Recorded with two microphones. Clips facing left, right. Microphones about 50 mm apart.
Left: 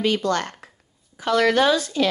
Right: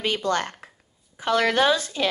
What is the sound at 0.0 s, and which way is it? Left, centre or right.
Speech, right.